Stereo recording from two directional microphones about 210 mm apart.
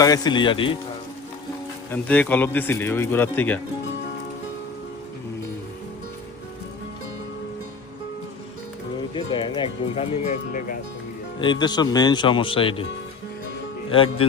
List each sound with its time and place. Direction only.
0.0 s speech: 20° left (ahead or behind)
1.9 s speech: 5° left (ahead or behind)
9.1 s speech: 25° left (ahead or behind)
11.3 s speech: 20° left (ahead or behind)
13.9 s speech: 25° left (ahead or behind)